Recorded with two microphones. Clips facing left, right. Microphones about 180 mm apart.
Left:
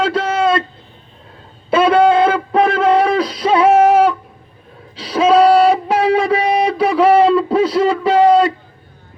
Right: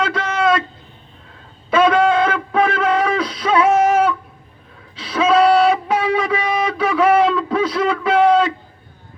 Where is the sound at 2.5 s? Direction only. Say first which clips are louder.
Left 4 dB; 35° left (ahead or behind).